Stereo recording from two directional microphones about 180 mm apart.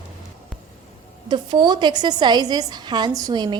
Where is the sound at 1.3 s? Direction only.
25° right (ahead or behind).